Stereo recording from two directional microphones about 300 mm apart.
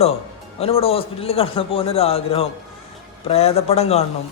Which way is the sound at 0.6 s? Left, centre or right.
Centre.